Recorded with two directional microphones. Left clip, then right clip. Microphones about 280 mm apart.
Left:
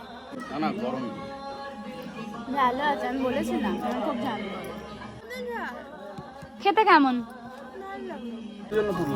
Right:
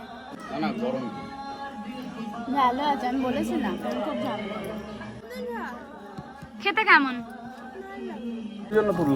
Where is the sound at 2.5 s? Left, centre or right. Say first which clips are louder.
Right 1 dB; right.